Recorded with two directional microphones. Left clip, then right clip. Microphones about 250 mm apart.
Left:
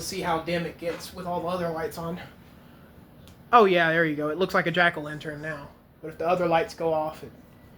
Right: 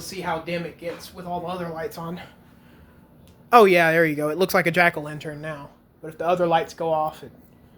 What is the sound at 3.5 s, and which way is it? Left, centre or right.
Speech, right.